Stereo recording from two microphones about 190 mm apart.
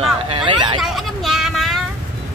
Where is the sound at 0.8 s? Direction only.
Centre (ahead or behind).